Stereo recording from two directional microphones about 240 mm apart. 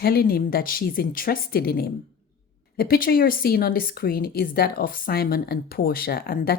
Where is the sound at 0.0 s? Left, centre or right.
Left.